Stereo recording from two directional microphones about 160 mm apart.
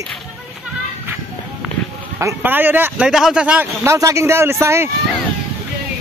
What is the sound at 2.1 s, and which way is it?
A man's voice, 15° right (ahead or behind).